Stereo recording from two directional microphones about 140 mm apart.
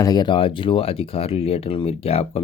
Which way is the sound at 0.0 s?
30° left (ahead or behind).